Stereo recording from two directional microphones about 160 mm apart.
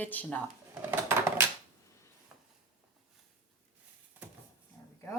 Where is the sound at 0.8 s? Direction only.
15° right (ahead or behind).